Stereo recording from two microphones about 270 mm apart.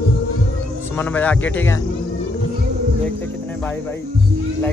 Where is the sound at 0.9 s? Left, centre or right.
Centre.